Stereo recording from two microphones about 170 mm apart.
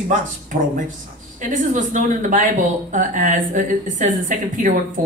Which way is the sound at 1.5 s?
50° right (ahead or behind).